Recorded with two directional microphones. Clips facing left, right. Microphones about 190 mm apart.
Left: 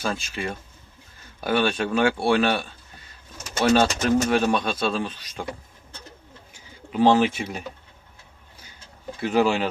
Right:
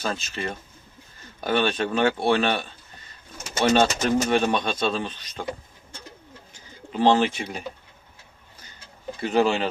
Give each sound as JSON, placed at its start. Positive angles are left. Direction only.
{"t": 0.0, "sound": "speech", "side_deg": 10}
{"t": 6.5, "sound": "bird", "side_deg": 5}
{"t": 9.1, "sound": "speech", "side_deg": 5}